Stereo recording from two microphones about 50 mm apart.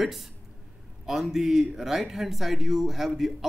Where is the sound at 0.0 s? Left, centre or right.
Centre.